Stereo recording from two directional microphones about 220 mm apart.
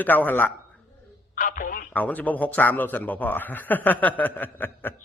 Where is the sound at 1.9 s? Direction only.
5° left (ahead or behind).